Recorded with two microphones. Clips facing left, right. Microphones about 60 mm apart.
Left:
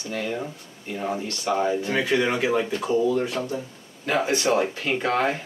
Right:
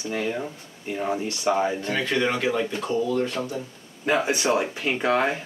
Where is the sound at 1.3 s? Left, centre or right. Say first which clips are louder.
Even; right.